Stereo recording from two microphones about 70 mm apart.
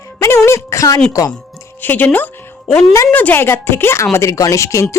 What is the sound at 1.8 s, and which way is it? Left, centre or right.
A woman's voice, left.